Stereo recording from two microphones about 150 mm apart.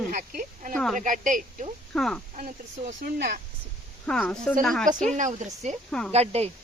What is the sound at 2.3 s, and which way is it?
Speech, 55° right (ahead or behind).